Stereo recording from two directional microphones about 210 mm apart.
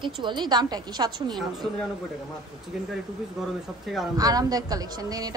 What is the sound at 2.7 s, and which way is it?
Speech, 5° right (ahead or behind).